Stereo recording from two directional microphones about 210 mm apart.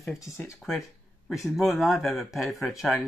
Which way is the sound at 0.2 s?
15° left (ahead or behind).